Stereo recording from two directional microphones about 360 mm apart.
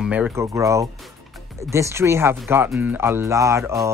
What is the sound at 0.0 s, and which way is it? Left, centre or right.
Speech, centre.